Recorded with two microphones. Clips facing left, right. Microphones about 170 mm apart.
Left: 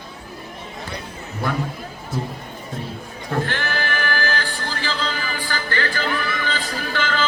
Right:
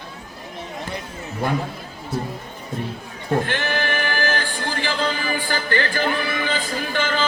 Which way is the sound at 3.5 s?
20° right (ahead or behind).